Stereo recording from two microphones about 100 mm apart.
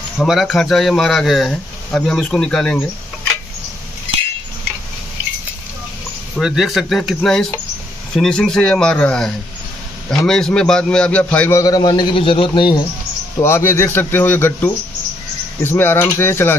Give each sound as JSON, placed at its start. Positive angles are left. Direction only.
{"t": 0.2, "sound": "speech", "side_deg": 0}
{"t": 6.3, "sound": "speech", "side_deg": 0}
{"t": 8.2, "sound": "a man's voice", "side_deg": 5}
{"t": 11.5, "sound": "a man's voice", "side_deg": 40}
{"t": 12.2, "sound": "a man's voice", "side_deg": 65}
{"t": 13.4, "sound": "speech", "side_deg": 25}